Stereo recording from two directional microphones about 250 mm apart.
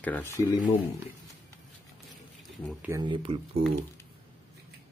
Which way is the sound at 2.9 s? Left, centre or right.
Centre.